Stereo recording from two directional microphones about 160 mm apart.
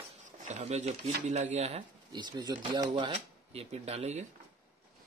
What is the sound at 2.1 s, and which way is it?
Speech, 25° right (ahead or behind).